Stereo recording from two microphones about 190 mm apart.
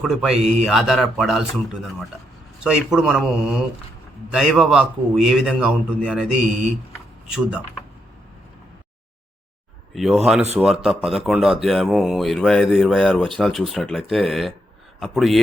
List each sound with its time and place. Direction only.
0.0 s speech: centre (ahead or behind)
0.3 s speech: 35° right (ahead or behind)
0.6 s speech: centre (ahead or behind)
9.9 s speech: centre (ahead or behind)